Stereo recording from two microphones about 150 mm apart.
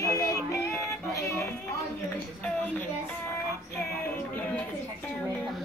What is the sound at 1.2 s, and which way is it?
Chatter, 20° left (ahead or behind).